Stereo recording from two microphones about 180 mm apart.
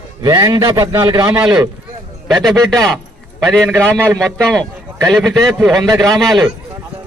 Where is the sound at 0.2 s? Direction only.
20° right (ahead or behind).